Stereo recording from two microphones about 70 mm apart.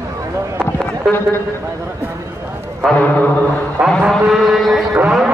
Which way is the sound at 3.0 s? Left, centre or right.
Left.